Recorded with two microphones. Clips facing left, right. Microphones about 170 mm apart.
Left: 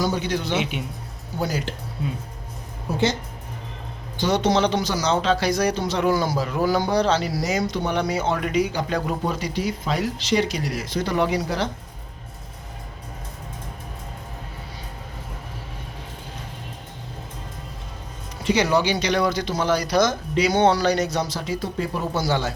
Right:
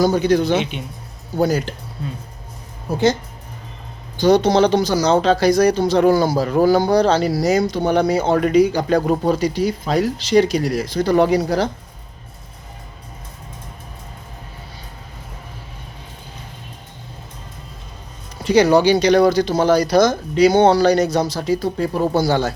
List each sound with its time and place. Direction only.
0.0 s speech: 40° right (ahead or behind)
4.2 s speech: 40° right (ahead or behind)
18.5 s speech: 35° right (ahead or behind)